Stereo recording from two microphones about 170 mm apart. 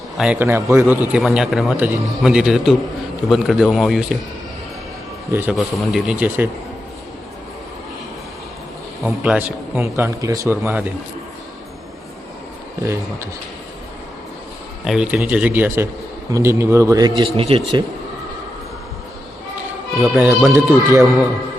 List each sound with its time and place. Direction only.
0.2 s a man's voice: 10° right (ahead or behind)
5.3 s speech: 10° right (ahead or behind)
9.0 s speech: 10° right (ahead or behind)
12.8 s speech: 15° right (ahead or behind)
14.8 s speech: 5° right (ahead or behind)
17.2 s speech: 35° right (ahead or behind)
20.0 s a man's voice: centre (ahead or behind)
20.5 s speech: 15° right (ahead or behind)